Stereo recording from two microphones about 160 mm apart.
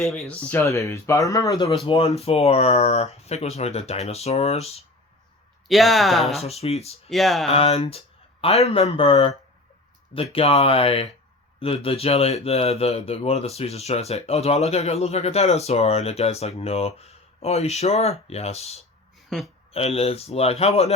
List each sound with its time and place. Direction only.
0.0 s speech: centre (ahead or behind); by 1.7 s 20° left (ahead or behind)
1.9 s speech: 40° left (ahead or behind)
5.6 s speech: centre (ahead or behind)
6.4 s speech: 40° left (ahead or behind)
7.1 s speech: centre (ahead or behind)
7.5 s speech: 40° left (ahead or behind)
10.3 s speech: 35° left (ahead or behind)
19.3 s speech: centre (ahead or behind)
19.7 s speech: 40° left (ahead or behind)